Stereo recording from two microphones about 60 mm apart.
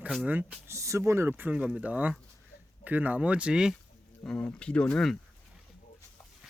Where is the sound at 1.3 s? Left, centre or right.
Right.